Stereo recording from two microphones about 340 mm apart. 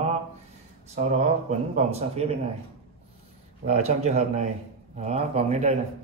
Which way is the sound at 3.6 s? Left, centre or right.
Centre.